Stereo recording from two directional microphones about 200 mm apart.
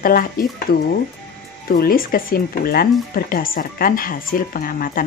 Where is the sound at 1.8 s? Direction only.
45° left (ahead or behind).